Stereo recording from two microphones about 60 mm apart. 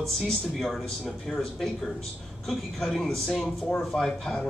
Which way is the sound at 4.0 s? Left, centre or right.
Centre.